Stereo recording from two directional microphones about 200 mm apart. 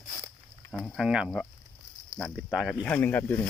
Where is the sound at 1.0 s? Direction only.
5° right (ahead or behind).